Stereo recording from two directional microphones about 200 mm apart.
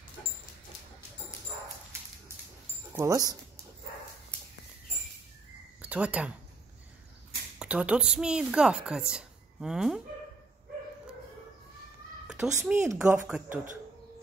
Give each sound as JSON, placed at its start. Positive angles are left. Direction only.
{"t": 2.9, "sound": "speech", "side_deg": -15}
{"t": 5.8, "sound": "speech", "side_deg": -5}
{"t": 7.5, "sound": "a woman's voice", "side_deg": -5}
{"t": 12.3, "sound": "speech", "side_deg": -5}